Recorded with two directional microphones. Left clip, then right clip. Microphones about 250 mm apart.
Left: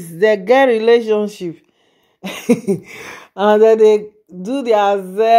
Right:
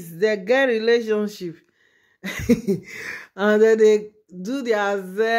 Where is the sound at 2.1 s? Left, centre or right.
Centre.